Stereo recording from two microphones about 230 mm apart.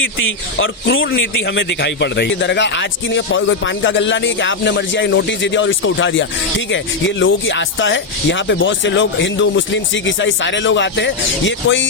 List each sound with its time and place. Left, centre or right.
0.6 s speech: left